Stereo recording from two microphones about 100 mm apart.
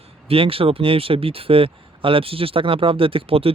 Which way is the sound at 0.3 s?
70° right (ahead or behind).